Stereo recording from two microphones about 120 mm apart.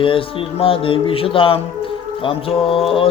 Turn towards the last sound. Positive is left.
turn(degrees=50)  # may be behind; listen again after turning